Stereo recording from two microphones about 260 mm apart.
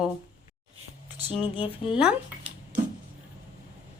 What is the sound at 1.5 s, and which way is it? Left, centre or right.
Speech, centre.